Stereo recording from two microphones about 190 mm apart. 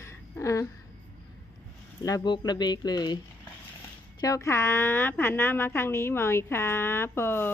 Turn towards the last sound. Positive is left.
turn(degrees=10)  # may be behind; listen again after turning